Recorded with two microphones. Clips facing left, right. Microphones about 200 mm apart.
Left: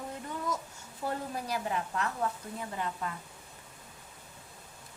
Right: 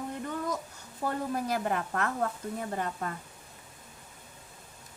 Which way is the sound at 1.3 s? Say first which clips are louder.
Right 4 dB; 55° right (ahead or behind).